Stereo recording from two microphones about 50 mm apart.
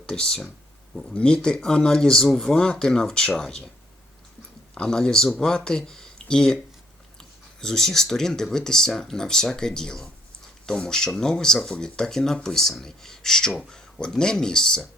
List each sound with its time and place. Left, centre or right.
0.0 s speech: centre
4.8 s speech: centre